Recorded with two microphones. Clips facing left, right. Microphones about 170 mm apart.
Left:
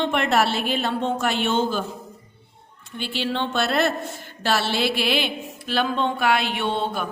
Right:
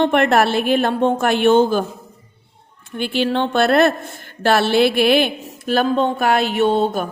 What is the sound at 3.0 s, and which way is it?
A man's voice, 55° right (ahead or behind).